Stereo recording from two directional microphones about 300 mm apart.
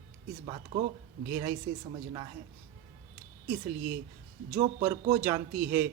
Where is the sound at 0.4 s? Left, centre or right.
Centre.